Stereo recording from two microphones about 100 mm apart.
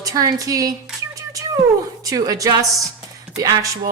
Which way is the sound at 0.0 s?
35° right (ahead or behind).